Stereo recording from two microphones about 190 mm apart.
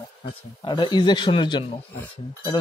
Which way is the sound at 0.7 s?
25° left (ahead or behind).